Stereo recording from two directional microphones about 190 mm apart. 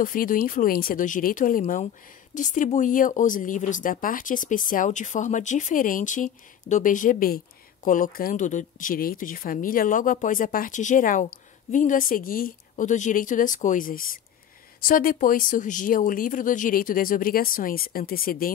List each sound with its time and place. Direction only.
0.0 s speech: 45° left (ahead or behind)